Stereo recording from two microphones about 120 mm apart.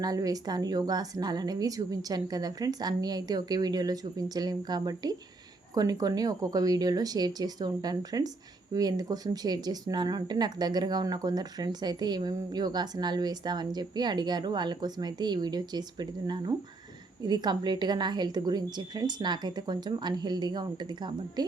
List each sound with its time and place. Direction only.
0.0 s speech: 30° right (ahead or behind)